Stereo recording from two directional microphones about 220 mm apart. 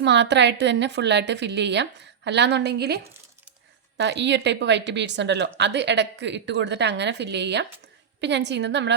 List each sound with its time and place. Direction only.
0.0 s a woman's voice: 50° right (ahead or behind)